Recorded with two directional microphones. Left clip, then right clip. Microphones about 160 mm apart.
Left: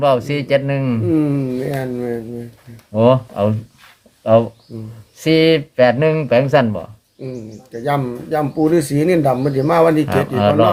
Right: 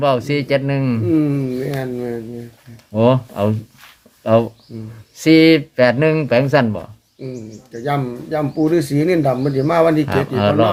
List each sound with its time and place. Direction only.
0.0 s speech: 15° right (ahead or behind)
1.0 s speech: 15° left (ahead or behind)
2.9 s speech: 10° right (ahead or behind)
7.7 s speech: 15° left (ahead or behind)
10.1 s speech: 15° right (ahead or behind)